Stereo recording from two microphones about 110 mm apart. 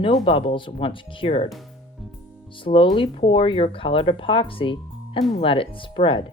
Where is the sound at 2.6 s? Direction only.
50° left (ahead or behind).